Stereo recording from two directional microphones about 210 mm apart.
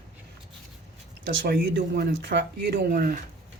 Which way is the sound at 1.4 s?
50° right (ahead or behind).